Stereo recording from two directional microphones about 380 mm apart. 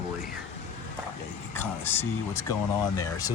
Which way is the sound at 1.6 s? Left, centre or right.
Centre.